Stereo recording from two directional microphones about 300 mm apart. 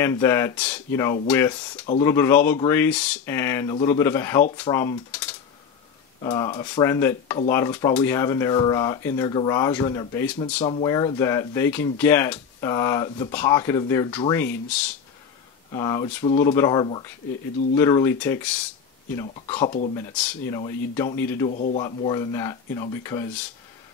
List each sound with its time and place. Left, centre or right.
0.0 s speech: centre
21.5 s speech: left
21.8 s speech: centre